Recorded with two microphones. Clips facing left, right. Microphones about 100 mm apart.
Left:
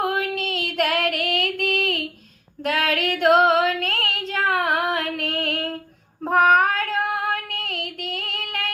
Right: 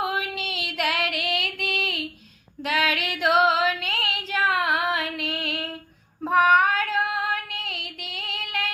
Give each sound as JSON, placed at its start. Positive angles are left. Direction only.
{"t": 0.0, "sound": "female singing", "side_deg": 45}